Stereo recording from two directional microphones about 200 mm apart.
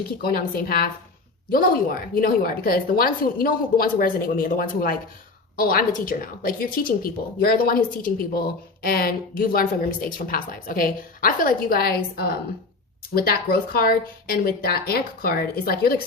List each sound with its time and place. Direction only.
0.2 s speech: 50° left (ahead or behind)